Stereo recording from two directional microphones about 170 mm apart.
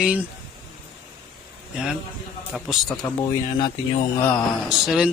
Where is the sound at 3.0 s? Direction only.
20° left (ahead or behind).